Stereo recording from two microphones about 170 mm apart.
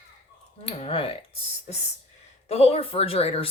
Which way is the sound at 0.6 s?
35° left (ahead or behind).